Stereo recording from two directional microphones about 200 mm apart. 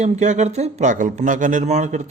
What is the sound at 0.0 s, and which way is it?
Speech, 35° right (ahead or behind).